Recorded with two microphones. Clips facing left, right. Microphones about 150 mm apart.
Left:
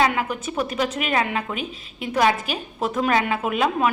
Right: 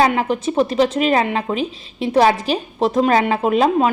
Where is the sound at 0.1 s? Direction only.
30° right (ahead or behind).